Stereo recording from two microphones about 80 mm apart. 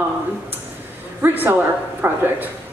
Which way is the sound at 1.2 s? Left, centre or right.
Right.